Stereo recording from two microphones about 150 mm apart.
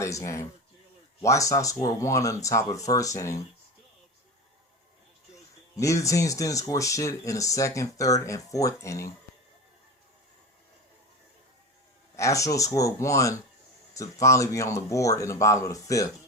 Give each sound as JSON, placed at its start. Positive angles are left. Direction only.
{"t": 0.0, "sound": "speech", "side_deg": 20}
{"t": 5.3, "sound": "speech", "side_deg": 20}
{"t": 12.1, "sound": "speech", "side_deg": 20}